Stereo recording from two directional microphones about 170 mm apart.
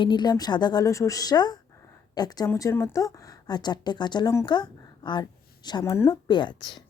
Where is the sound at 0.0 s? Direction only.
25° left (ahead or behind).